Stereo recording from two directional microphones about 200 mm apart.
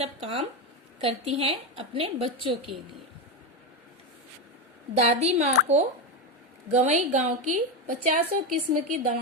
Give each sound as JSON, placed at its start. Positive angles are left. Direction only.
{"t": 0.0, "sound": "a woman's voice", "side_deg": -30}
{"t": 4.9, "sound": "a woman's voice", "side_deg": -30}